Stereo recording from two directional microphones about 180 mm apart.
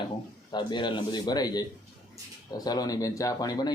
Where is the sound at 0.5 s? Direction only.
25° left (ahead or behind).